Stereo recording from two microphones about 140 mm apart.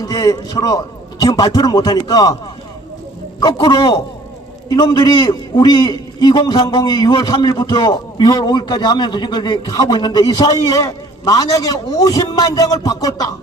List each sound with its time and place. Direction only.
0.0 s a man's voice: 25° left (ahead or behind)
3.4 s a man's voice: 35° left (ahead or behind)